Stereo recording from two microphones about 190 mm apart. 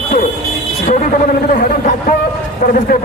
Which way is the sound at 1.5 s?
45° left (ahead or behind).